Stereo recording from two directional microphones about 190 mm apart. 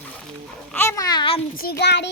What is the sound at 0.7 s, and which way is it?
Speech, 15° left (ahead or behind).